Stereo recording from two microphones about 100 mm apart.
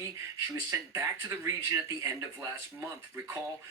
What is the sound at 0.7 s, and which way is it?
Speech, 30° right (ahead or behind).